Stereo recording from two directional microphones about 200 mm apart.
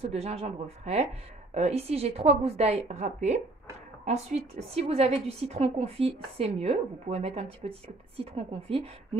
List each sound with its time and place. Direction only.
0.0 s a woman's voice: 30° right (ahead or behind)